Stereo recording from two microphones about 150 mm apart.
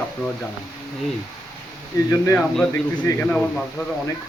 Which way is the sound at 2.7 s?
15° left (ahead or behind).